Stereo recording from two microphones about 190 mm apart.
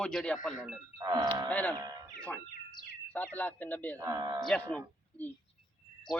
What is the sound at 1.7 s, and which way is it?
Speech, 20° right (ahead or behind).